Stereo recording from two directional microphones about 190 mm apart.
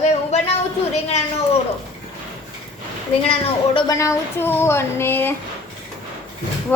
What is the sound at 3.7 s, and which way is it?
A woman's voice, 15° left (ahead or behind).